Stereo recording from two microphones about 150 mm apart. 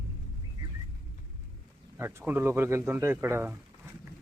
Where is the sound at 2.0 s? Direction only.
15° right (ahead or behind).